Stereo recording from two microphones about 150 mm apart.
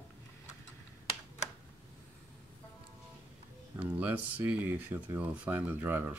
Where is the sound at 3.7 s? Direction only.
10° right (ahead or behind).